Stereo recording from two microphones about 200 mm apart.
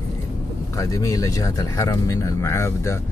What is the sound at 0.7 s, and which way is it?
Speech, 15° left (ahead or behind).